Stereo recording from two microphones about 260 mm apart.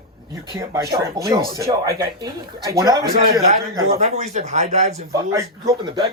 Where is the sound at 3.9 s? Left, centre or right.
Right.